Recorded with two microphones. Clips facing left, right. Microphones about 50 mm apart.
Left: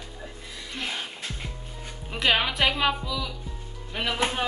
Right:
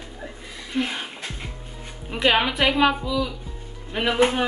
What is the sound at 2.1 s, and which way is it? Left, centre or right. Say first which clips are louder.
A woman's voice: right 4 dB; centre.